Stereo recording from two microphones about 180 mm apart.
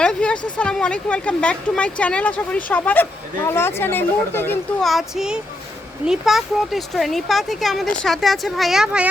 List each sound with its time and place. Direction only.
0.0 s a sound: 5° left (ahead or behind)
0.5 s speech: 5° left (ahead or behind)
4.8 s speech: centre (ahead or behind)